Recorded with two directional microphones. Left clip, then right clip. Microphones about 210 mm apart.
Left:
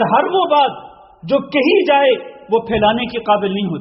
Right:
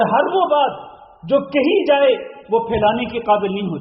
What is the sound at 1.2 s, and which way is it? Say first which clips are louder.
A man's voice: left 2 dB; 30° left (ahead or behind).